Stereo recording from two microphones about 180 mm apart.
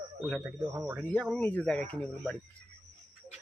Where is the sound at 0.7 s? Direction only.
15° right (ahead or behind).